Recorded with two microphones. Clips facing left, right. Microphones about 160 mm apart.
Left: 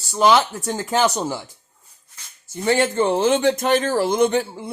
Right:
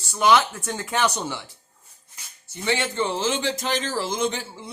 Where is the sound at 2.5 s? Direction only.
45° left (ahead or behind).